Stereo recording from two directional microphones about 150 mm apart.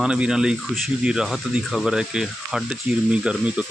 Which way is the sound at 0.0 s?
5° right (ahead or behind).